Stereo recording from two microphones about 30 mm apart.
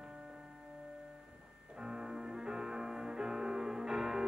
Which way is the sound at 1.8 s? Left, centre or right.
Right.